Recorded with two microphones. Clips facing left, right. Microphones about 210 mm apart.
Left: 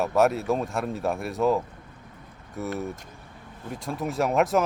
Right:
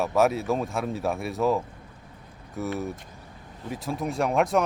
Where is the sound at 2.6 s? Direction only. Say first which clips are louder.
Right 1 dB; centre (ahead or behind).